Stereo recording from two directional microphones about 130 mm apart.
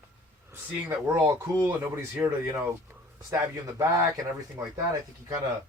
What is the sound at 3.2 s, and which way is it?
Speech, 30° right (ahead or behind).